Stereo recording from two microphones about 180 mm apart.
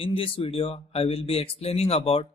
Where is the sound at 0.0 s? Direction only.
30° left (ahead or behind).